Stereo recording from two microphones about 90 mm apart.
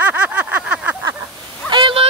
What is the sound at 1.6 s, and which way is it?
Vehicle, 60° right (ahead or behind).